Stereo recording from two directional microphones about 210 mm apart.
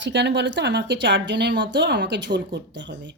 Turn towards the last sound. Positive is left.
turn(degrees=-55)  # may be behind; listen again after turning